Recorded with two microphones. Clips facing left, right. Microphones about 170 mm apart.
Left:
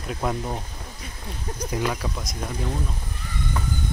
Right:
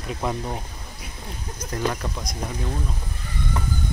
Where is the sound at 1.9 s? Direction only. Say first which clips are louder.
Even; centre (ahead or behind).